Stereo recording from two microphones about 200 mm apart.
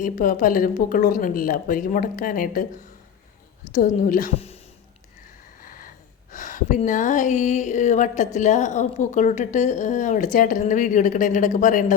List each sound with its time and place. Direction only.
0.0 s a woman's voice: 40° left (ahead or behind)
3.7 s speech: 40° left (ahead or behind)
5.6 s a sound: 45° left (ahead or behind)
6.3 s speech: 40° left (ahead or behind)